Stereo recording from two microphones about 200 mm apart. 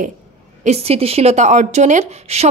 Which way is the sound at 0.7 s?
30° right (ahead or behind).